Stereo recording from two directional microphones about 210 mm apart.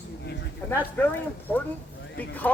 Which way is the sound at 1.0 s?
5° left (ahead or behind).